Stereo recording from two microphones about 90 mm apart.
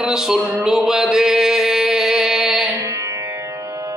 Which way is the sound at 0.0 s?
5° right (ahead or behind).